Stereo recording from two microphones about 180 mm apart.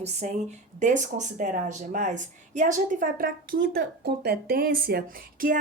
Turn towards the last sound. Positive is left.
turn(degrees=-50)  # may be behind; listen again after turning